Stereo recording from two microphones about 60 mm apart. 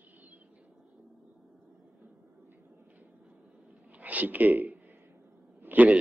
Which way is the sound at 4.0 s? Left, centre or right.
Right.